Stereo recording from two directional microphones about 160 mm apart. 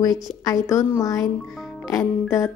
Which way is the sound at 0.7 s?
20° left (ahead or behind).